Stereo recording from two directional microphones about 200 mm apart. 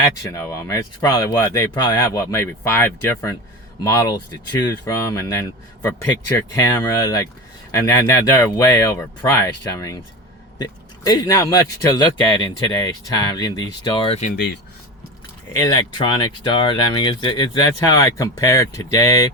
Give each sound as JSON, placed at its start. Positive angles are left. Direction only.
{"t": 0.0, "sound": "speech", "side_deg": 15}
{"t": 14.3, "sound": "speech", "side_deg": 55}
{"t": 15.5, "sound": "speech", "side_deg": 20}